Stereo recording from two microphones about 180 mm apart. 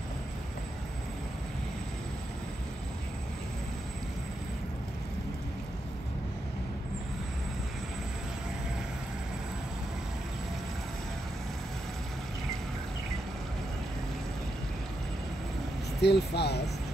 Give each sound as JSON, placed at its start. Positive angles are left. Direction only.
{"t": 16.0, "sound": "speech", "side_deg": 70}